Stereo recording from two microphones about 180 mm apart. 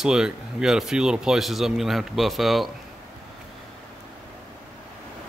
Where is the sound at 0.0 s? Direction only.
5° right (ahead or behind).